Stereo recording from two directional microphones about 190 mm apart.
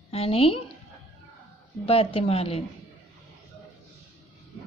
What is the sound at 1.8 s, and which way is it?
Speech, 30° left (ahead or behind).